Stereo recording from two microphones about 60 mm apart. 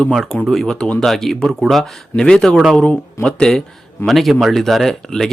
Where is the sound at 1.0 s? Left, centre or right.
Centre.